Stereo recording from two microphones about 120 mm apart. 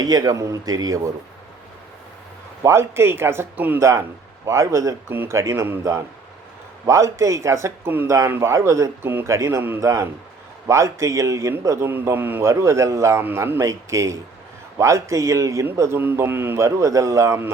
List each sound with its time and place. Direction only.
0.0 s a man's voice: 35° right (ahead or behind)
2.6 s a man's voice: 20° right (ahead or behind)